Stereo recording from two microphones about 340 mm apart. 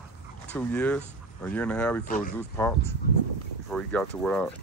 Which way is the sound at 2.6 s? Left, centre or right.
Centre.